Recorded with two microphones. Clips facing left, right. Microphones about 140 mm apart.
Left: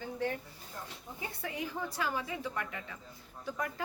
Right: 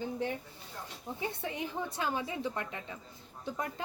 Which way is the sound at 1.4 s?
25° right (ahead or behind).